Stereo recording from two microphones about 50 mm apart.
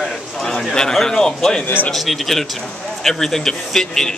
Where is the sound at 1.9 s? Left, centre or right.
Centre.